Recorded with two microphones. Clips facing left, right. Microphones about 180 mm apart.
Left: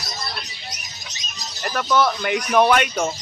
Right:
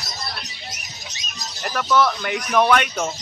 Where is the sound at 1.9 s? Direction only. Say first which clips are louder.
Even; 5° left (ahead or behind).